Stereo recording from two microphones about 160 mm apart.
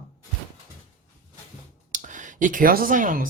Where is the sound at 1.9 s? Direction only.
55° right (ahead or behind).